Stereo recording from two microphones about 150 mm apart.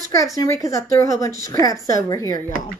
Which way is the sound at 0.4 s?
20° left (ahead or behind).